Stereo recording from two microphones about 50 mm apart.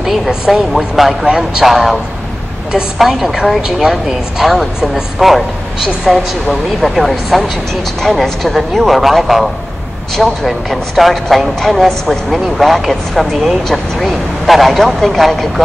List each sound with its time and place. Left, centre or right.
0.0 s speech: centre
1.2 s speech: centre
1.6 s speech: centre
3.0 s speech: centre